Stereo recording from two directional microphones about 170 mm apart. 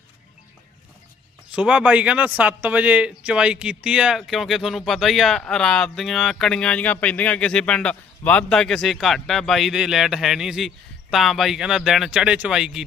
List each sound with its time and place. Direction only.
1.5 s a man's voice: 5° right (ahead or behind)